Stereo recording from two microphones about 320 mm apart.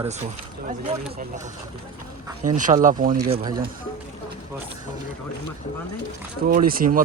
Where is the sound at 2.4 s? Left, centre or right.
Right.